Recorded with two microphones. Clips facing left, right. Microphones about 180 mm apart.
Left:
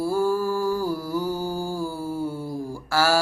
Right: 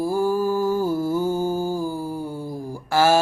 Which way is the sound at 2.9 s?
20° right (ahead or behind).